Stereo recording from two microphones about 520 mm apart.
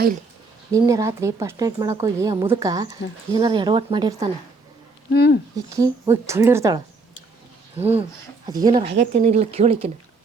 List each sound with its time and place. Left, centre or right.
0.7 s speech: centre
5.1 s speech: centre
5.5 s speech: centre